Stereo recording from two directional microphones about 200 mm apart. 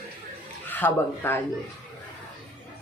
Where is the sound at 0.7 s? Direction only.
10° left (ahead or behind).